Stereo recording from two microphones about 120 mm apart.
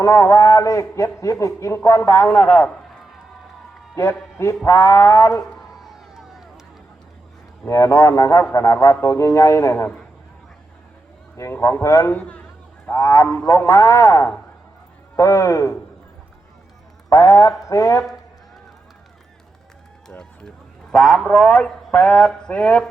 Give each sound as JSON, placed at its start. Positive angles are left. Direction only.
{"t": 0.0, "sound": "a man's voice", "side_deg": 25}
{"t": 2.2, "sound": "speech", "side_deg": 10}
{"t": 4.6, "sound": "a man's voice", "side_deg": 25}
{"t": 5.4, "sound": "a sound", "side_deg": 0}
{"t": 7.7, "sound": "a man's voice", "side_deg": 25}
{"t": 11.5, "sound": "a man's voice", "side_deg": 20}
{"t": 12.2, "sound": "a sound", "side_deg": 10}
{"t": 12.9, "sound": "a man's voice", "side_deg": 25}
{"t": 17.1, "sound": "a man's voice", "side_deg": 25}
{"t": 20.1, "sound": "run", "side_deg": 5}
{"t": 20.9, "sound": "speech", "side_deg": 5}